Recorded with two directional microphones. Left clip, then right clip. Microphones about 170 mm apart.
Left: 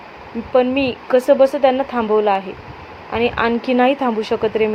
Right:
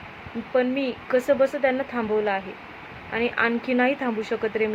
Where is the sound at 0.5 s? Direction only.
15° left (ahead or behind).